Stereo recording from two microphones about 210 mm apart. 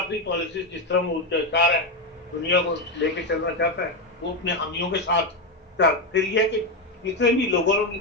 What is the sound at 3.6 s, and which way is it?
A man's voice, 55° left (ahead or behind).